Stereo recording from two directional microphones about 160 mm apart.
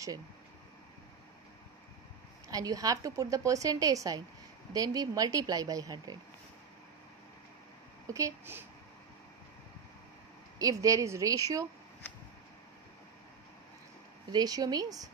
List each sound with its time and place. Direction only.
2.4 s a woman's voice: 20° right (ahead or behind)
8.1 s a woman's voice: 20° right (ahead or behind)
10.6 s a woman's voice: 20° right (ahead or behind)
14.3 s a woman's voice: 25° right (ahead or behind)